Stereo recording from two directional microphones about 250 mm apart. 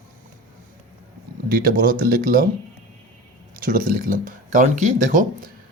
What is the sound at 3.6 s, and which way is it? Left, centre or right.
Speech, right.